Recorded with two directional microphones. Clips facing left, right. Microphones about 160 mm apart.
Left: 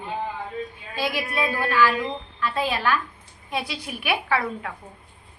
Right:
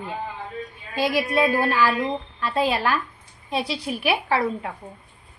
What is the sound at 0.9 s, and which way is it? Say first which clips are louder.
A woman's voice: right 5 dB; 40° right (ahead or behind).